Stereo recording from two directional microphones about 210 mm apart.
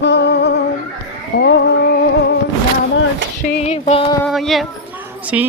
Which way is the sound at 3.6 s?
30° left (ahead or behind).